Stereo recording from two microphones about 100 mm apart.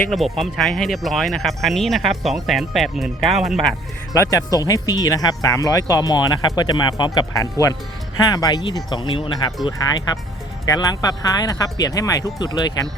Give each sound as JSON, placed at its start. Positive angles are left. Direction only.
{"t": 0.1, "sound": "speech", "side_deg": 0}
{"t": 4.1, "sound": "speech", "side_deg": 35}
{"t": 9.8, "sound": "speech", "side_deg": 40}